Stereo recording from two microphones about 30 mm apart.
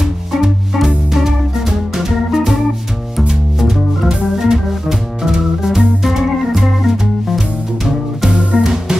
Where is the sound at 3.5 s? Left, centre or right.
Centre.